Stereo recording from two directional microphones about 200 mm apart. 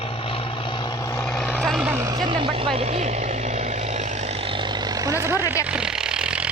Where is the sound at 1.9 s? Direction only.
15° right (ahead or behind).